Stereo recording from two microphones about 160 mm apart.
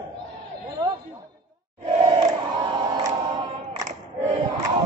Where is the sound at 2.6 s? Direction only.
35° right (ahead or behind).